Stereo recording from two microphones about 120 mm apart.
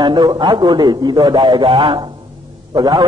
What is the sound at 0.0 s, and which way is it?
A man's voice, 40° right (ahead or behind).